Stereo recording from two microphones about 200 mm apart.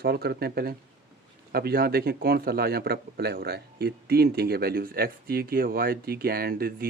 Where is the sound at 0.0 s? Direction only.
55° right (ahead or behind).